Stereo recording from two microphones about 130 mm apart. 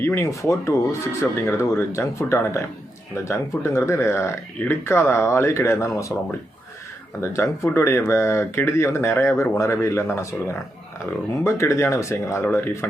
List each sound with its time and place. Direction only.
0.0 s speech: 20° left (ahead or behind)